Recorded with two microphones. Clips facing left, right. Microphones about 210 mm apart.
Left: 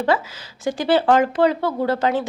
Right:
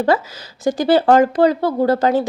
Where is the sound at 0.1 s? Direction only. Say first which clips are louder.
Right 3 dB; 40° right (ahead or behind).